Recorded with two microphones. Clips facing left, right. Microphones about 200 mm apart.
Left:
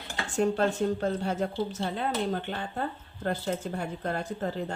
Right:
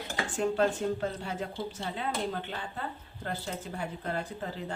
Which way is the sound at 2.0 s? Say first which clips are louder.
Left 3 dB; 50° left (ahead or behind).